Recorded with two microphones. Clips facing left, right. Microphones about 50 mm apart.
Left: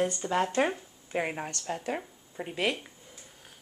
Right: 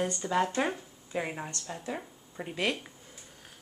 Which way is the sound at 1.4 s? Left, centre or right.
Left.